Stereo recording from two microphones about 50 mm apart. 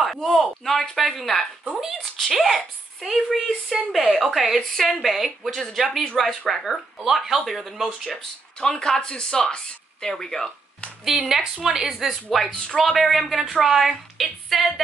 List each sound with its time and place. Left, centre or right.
0.0 s a sound: centre
1.6 s speech: centre
2.1 s a woman's voice: centre
8.5 s speech: centre
11.1 s speech: centre
12.1 s a woman's voice: centre